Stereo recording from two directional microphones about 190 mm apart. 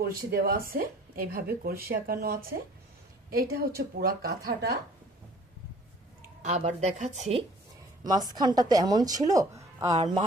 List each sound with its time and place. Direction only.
0.0 s speech: 55° right (ahead or behind)
6.4 s speech: 40° right (ahead or behind)
8.0 s a woman's voice: 20° right (ahead or behind)
9.9 s speech: 35° right (ahead or behind)